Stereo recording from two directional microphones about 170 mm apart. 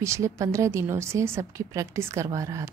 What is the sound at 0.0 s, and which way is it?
A woman's voice, 15° right (ahead or behind).